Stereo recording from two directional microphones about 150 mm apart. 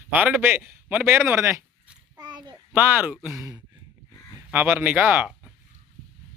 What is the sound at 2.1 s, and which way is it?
Child singing, 30° right (ahead or behind).